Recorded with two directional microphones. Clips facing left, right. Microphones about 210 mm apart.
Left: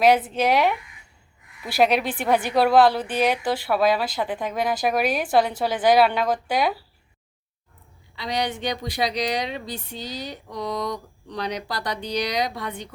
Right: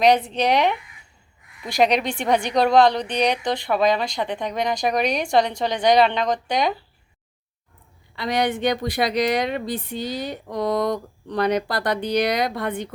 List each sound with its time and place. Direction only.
0.0 s a woman's voice: 5° left (ahead or behind)
8.1 s a woman's voice: 55° right (ahead or behind)